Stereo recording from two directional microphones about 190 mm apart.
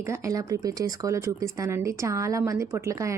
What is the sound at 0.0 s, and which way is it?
Speech, 15° right (ahead or behind).